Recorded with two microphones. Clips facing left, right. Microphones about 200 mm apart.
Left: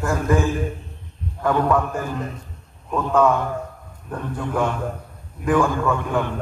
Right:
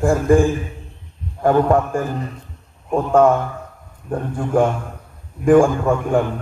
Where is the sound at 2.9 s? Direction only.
50° right (ahead or behind).